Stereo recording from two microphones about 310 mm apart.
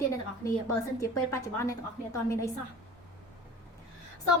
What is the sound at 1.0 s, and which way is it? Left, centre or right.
A woman's voice, centre.